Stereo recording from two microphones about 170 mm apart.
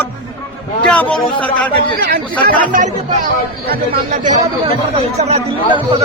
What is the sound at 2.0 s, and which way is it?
Speech, 60° right (ahead or behind).